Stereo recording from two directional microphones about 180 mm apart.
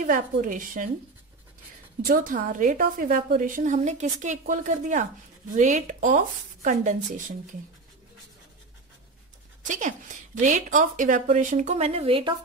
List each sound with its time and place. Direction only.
0.0 s a woman's voice: 50° right (ahead or behind)
2.0 s a woman's voice: 50° right (ahead or behind)
9.7 s a woman's voice: 45° right (ahead or behind)